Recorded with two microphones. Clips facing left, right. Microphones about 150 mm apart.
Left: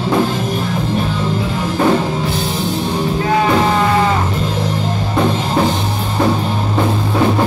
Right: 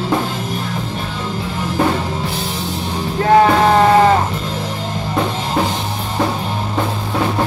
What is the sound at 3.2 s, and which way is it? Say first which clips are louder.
Music: right 5 dB; 50° right (ahead or behind).